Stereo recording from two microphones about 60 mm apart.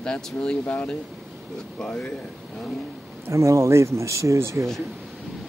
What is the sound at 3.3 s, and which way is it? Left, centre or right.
Speech, right.